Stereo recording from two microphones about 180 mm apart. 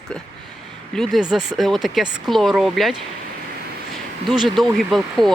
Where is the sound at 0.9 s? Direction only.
Centre (ahead or behind).